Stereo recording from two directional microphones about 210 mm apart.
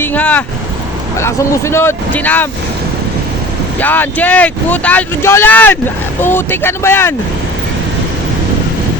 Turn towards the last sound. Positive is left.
turn(degrees=10)  # may be behind; listen again after turning